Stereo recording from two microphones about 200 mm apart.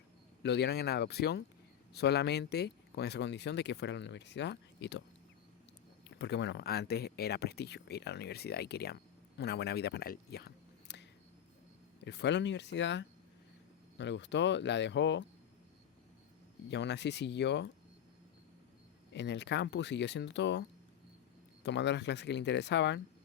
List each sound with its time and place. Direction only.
0.4 s speech: 60° left (ahead or behind)
6.1 s speech: 60° left (ahead or behind)
12.0 s speech: 60° left (ahead or behind)
16.6 s speech: 60° left (ahead or behind)
19.1 s speech: 60° left (ahead or behind)